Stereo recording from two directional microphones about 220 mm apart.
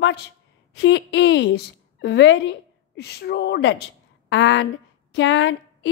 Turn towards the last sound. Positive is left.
turn(degrees=55)  # may be behind; listen again after turning